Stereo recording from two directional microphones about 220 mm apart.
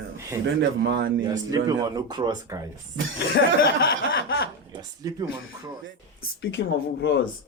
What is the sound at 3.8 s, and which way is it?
Speech, 45° left (ahead or behind).